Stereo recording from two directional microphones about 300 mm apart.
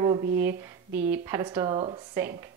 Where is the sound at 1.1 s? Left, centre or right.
Centre.